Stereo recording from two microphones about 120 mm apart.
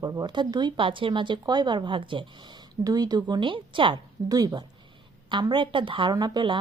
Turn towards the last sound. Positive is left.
turn(degrees=-40)  # may be behind; listen again after turning